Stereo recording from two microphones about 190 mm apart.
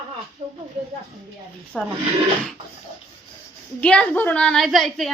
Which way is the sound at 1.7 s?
5° left (ahead or behind).